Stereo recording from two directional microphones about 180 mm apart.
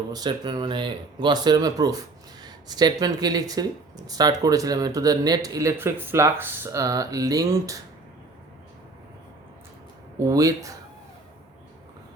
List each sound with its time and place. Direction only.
0.1 s speech: 25° right (ahead or behind)
10.2 s speech: 20° right (ahead or behind)